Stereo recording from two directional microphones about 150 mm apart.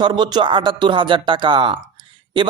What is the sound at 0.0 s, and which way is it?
A man's voice, 30° right (ahead or behind).